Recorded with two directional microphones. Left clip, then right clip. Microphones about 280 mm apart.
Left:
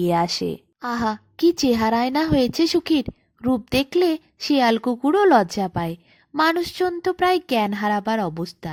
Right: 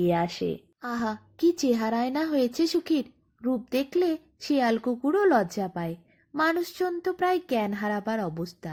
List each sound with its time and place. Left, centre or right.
0.0 s speech: left